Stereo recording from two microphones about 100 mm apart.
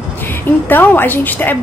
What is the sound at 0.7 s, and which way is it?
Speech, 20° left (ahead or behind).